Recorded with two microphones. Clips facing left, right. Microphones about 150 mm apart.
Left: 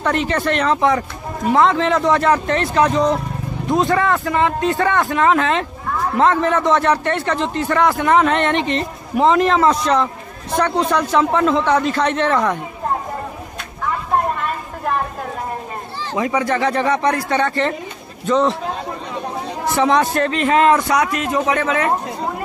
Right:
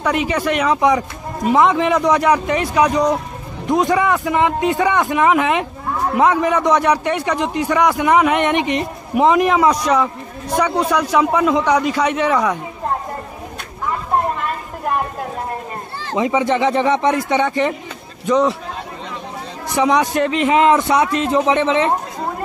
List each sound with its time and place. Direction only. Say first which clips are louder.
0.0 s speech: even; 10° right (ahead or behind)
16.2 s a man's voice: right 2 dB; 20° right (ahead or behind)
19.7 s a man's voice: even; 15° right (ahead or behind)